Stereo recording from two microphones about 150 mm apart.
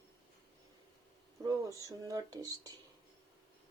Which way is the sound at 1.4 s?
20° right (ahead or behind).